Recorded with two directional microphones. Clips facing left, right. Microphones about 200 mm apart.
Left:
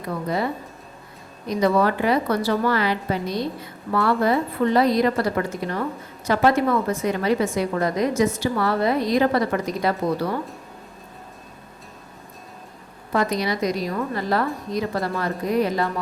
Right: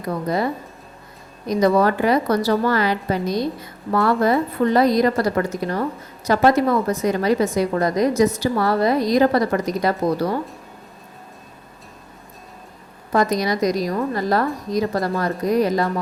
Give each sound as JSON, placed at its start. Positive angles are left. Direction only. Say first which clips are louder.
{"t": 1.5, "sound": "a woman's voice", "louder": "right 3 dB", "side_deg": -40}
{"t": 13.1, "sound": "a woman's voice", "louder": "right 3 dB", "side_deg": -40}